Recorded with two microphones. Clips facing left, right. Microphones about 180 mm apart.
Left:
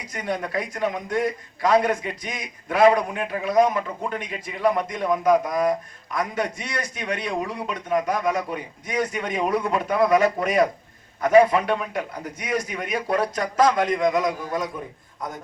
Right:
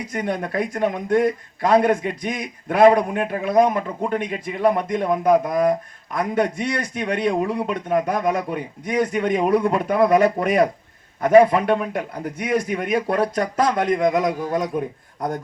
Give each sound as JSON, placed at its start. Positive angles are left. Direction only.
{"t": 0.0, "sound": "a man's voice", "side_deg": -55}